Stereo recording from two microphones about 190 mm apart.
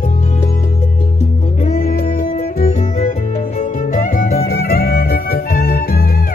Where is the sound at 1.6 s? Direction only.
45° left (ahead or behind).